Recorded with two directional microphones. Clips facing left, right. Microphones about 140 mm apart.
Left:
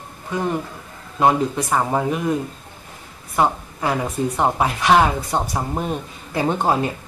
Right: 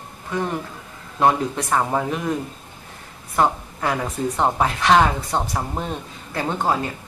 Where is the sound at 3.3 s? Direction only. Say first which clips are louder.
Left 1 dB; 5° left (ahead or behind).